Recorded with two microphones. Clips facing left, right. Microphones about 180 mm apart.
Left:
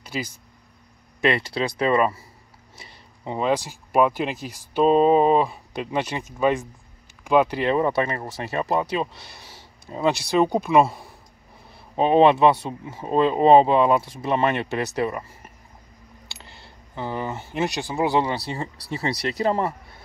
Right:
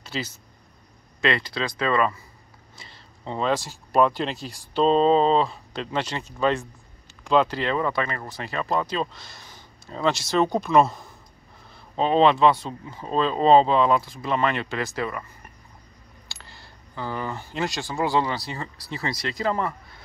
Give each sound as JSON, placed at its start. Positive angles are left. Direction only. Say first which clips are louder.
{"t": 0.0, "sound": "a sound", "louder": "left 1 dB", "side_deg": 10}
{"t": 1.2, "sound": "speech", "louder": "left 3 dB", "side_deg": 25}
{"t": 9.8, "sound": "speech", "louder": "left 2 dB", "side_deg": 15}